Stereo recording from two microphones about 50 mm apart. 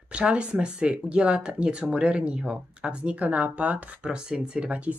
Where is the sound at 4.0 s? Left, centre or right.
Centre.